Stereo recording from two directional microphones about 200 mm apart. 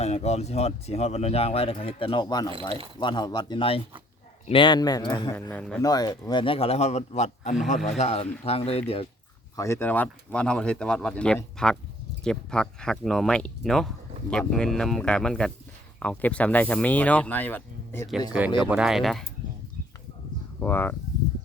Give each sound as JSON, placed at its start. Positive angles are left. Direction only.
{"t": 0.0, "sound": "speech", "side_deg": 30}
{"t": 5.5, "sound": "speech", "side_deg": 5}
{"t": 5.8, "sound": "speech", "side_deg": 20}
{"t": 9.6, "sound": "speech", "side_deg": 15}
{"t": 18.3, "sound": "speech", "side_deg": -5}
{"t": 20.6, "sound": "speech", "side_deg": 10}